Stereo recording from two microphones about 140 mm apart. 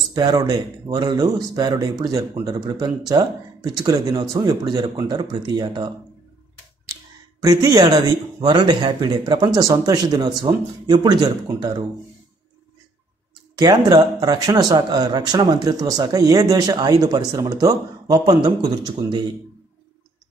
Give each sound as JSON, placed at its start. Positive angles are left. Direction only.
{"t": 0.1, "sound": "speech", "side_deg": -30}
{"t": 7.4, "sound": "speech", "side_deg": -25}
{"t": 13.6, "sound": "speech", "side_deg": -30}